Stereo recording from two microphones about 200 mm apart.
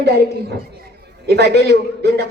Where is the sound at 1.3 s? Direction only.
55° right (ahead or behind).